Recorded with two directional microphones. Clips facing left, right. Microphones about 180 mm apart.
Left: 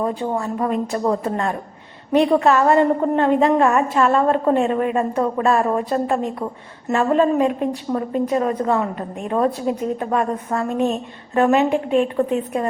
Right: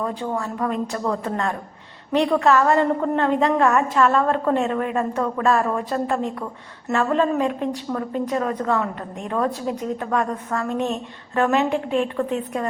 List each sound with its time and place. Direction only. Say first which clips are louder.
0.0 s a woman's voice: left 3 dB; 20° left (ahead or behind)
10.7 s a woman's voice: left 5 dB; 10° left (ahead or behind)